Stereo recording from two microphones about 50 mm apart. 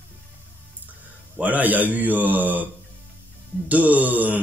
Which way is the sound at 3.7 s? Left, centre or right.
Right.